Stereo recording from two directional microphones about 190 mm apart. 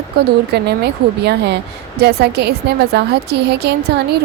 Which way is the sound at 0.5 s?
60° right (ahead or behind).